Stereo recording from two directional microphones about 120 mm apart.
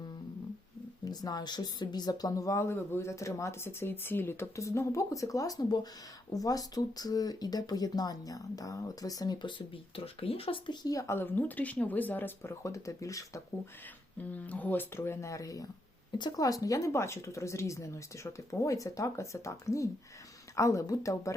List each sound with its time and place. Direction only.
1.0 s speech: 35° left (ahead or behind); by 10.8 s 50° left (ahead or behind)
10.8 s speech: 25° left (ahead or behind)
14.2 s speech: 15° left (ahead or behind)